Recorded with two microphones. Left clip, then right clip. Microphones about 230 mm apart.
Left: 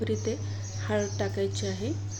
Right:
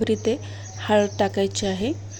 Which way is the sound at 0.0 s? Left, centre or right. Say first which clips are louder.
Right 8 dB; right.